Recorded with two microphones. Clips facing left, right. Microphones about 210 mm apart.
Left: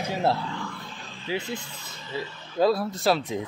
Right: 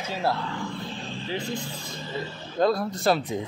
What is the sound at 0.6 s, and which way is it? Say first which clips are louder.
Vehicle: right 6 dB; 30° right (ahead or behind).